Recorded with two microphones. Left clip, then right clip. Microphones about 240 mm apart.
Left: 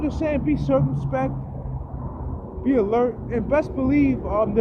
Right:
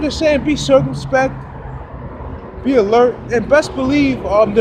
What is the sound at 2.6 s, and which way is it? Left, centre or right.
Speech, centre.